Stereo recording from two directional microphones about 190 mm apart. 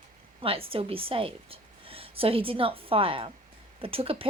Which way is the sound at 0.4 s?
30° right (ahead or behind).